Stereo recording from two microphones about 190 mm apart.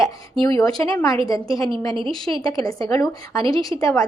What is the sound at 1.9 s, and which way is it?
Speech, 25° right (ahead or behind).